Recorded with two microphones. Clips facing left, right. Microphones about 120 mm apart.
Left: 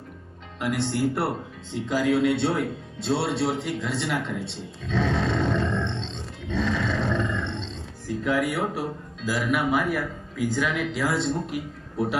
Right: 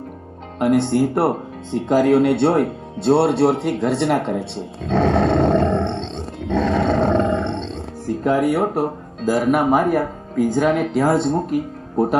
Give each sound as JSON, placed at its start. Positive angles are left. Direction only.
{"t": 0.6, "sound": "speech", "side_deg": -50}